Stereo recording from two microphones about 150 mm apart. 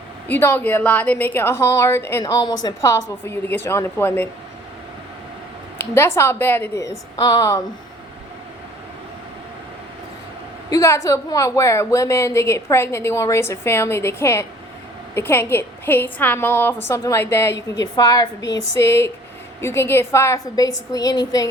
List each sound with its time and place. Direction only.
0.3 s speech: 15° left (ahead or behind)
2.2 s speech: 25° left (ahead or behind)
5.7 s a woman's voice: 15° left (ahead or behind)
10.7 s a woman's voice: 20° left (ahead or behind)